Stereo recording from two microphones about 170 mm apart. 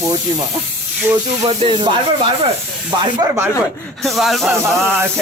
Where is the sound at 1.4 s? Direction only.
30° right (ahead or behind).